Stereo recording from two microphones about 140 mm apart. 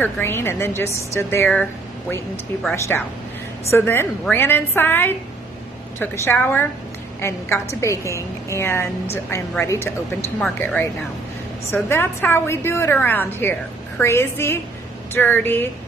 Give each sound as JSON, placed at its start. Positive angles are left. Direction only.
{"t": 0.0, "sound": "a woman's voice", "side_deg": 15}
{"t": 1.5, "sound": "a woman's voice", "side_deg": 10}